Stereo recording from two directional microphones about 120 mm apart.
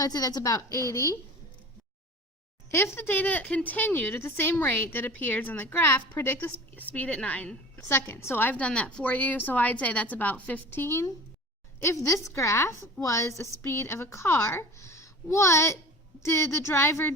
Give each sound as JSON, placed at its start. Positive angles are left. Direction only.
{"t": 0.0, "sound": "a woman's voice", "side_deg": 35}
{"t": 2.6, "sound": "a woman's voice", "side_deg": 20}